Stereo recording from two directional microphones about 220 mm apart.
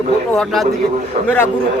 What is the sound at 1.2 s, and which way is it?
Speech, 30° right (ahead or behind).